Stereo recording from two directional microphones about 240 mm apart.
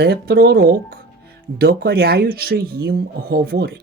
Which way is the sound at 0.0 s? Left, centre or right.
Right.